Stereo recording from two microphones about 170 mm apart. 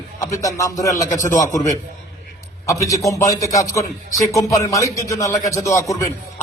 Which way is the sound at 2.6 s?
20° left (ahead or behind).